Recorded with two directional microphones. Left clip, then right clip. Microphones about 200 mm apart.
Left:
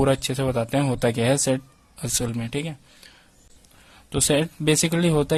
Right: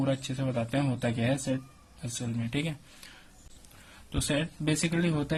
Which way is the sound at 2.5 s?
25° left (ahead or behind).